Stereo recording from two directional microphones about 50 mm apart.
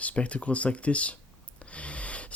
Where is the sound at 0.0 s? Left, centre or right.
Left.